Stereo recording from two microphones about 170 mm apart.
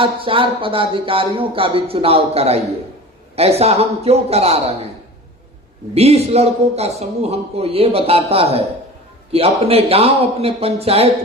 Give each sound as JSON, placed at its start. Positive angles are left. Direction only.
{"t": 0.0, "sound": "a man's voice", "side_deg": -30}
{"t": 5.9, "sound": "a man's voice", "side_deg": -35}